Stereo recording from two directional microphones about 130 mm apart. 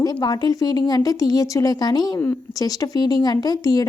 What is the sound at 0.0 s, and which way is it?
Speech, 30° left (ahead or behind).